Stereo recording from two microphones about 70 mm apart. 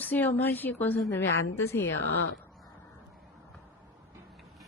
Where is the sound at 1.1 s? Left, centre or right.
Left.